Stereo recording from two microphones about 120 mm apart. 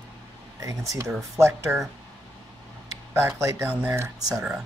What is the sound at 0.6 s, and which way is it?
Speech, 30° right (ahead or behind).